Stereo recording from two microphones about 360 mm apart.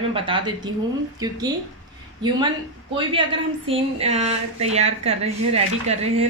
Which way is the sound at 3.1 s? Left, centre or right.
Centre.